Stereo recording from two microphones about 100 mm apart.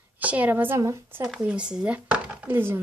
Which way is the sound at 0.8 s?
30° right (ahead or behind).